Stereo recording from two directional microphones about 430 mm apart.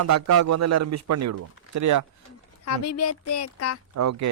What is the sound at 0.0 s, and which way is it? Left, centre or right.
A man's voice, right.